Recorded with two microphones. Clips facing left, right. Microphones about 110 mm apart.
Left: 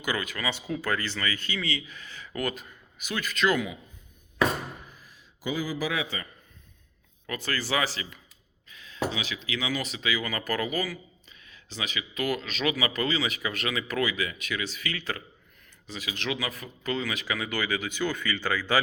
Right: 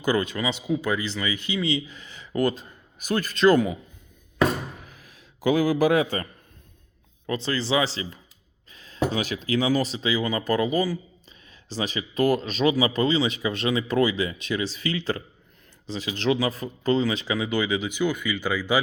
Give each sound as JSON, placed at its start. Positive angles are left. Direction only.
{"t": 0.0, "sound": "speech", "side_deg": -30}
{"t": 3.0, "sound": "speech", "side_deg": -40}
{"t": 4.9, "sound": "a sound", "side_deg": -75}
{"t": 7.3, "sound": "speech", "side_deg": -25}